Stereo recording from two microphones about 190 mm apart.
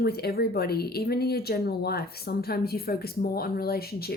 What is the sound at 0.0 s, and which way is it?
Speech, 55° left (ahead or behind).